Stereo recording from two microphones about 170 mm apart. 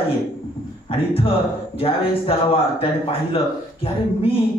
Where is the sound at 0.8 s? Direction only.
35° left (ahead or behind).